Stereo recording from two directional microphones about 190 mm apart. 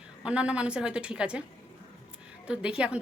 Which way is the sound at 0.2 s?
5° right (ahead or behind).